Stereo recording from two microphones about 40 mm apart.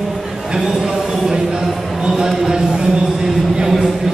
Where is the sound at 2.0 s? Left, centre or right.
Centre.